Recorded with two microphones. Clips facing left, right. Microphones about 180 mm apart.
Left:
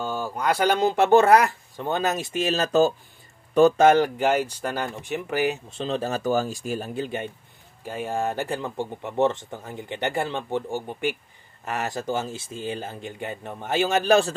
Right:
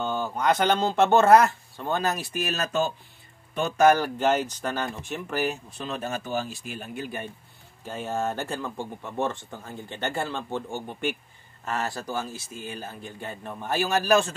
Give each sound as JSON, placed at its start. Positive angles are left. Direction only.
{"t": 0.0, "sound": "speech", "side_deg": 10}
{"t": 3.8, "sound": "speech", "side_deg": 25}
{"t": 4.2, "sound": "speech", "side_deg": 10}
{"t": 5.7, "sound": "speech", "side_deg": 30}
{"t": 7.0, "sound": "speech", "side_deg": 25}
{"t": 7.8, "sound": "speech", "side_deg": 10}